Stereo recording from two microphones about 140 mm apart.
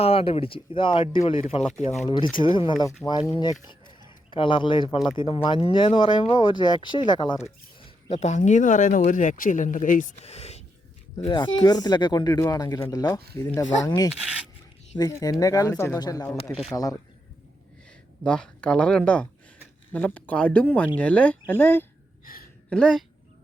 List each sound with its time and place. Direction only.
0.0 s speech: 45° left (ahead or behind)
1.8 s speech: 55° left (ahead or behind)
2.4 s speech: 35° left (ahead or behind)
3.7 s a sound: 35° left (ahead or behind)
5.1 s speech: 40° left (ahead or behind)
8.1 s speech: 55° left (ahead or behind)
11.3 s speech: 30° left (ahead or behind)
14.1 s speech: 5° right (ahead or behind)
14.9 s speech: 25° left (ahead or behind)
18.2 s speech: 5° left (ahead or behind)
22.2 s a sound: 90° left
22.7 s speech: 5° left (ahead or behind)